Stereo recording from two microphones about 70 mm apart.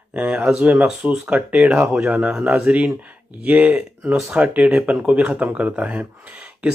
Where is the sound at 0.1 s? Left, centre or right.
Centre.